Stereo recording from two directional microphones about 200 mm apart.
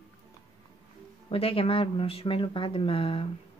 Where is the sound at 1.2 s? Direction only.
30° left (ahead or behind).